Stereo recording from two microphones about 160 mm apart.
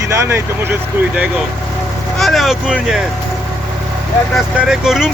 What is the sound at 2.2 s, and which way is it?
Speech, centre (ahead or behind).